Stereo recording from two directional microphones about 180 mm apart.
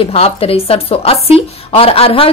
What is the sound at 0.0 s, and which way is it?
Speech, 35° left (ahead or behind).